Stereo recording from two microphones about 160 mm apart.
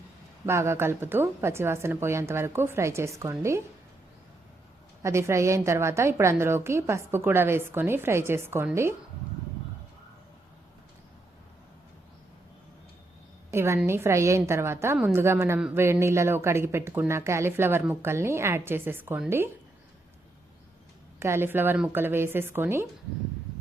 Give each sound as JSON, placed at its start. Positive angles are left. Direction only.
{"t": 0.4, "sound": "a woman's voice", "side_deg": -15}
{"t": 5.0, "sound": "a woman's voice", "side_deg": -15}
{"t": 13.5, "sound": "a woman's voice", "side_deg": -15}
{"t": 21.2, "sound": "a woman's voice", "side_deg": -15}